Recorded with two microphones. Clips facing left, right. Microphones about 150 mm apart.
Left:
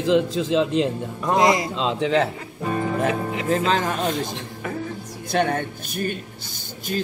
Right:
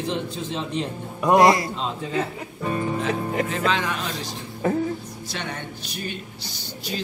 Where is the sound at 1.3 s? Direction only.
20° left (ahead or behind).